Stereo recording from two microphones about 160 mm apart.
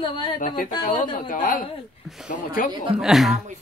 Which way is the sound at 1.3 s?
60° left (ahead or behind).